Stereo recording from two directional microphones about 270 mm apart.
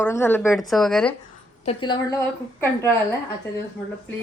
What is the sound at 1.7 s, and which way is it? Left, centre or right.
A woman's voice, centre.